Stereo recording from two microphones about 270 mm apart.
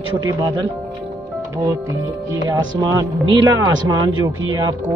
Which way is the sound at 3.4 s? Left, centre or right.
Centre.